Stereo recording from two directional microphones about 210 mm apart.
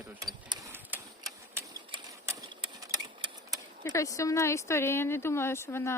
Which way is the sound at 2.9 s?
20° right (ahead or behind).